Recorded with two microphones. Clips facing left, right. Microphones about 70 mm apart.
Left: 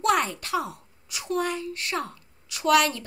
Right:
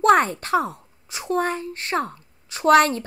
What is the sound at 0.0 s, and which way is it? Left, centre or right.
A woman's voice, right.